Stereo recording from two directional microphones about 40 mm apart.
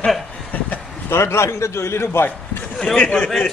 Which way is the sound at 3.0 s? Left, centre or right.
Left.